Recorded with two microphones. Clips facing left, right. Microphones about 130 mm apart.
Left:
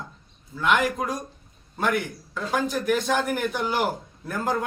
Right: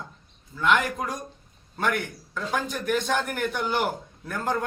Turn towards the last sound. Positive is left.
turn(degrees=5)  # may be behind; listen again after turning